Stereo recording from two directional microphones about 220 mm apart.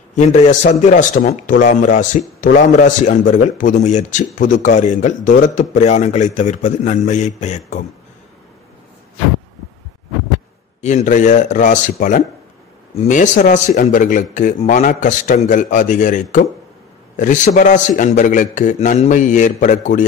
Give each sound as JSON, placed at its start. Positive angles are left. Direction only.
{"t": 0.1, "sound": "a man's voice", "side_deg": 30}
{"t": 10.8, "sound": "a man's voice", "side_deg": 30}